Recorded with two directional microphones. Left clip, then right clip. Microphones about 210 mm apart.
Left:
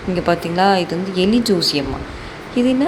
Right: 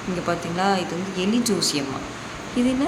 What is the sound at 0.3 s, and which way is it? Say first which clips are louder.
A woman's voice: left 7 dB; 25° left (ahead or behind).